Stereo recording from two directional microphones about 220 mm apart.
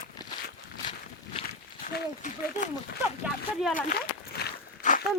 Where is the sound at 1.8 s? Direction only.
35° left (ahead or behind).